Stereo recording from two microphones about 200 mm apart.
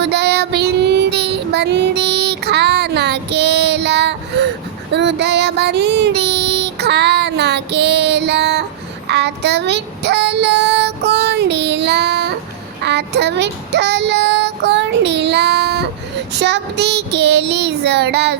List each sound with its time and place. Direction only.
0.0 s child singing: 55° right (ahead or behind)